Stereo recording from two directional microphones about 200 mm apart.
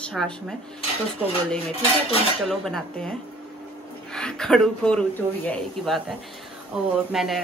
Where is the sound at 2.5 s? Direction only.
Centre (ahead or behind).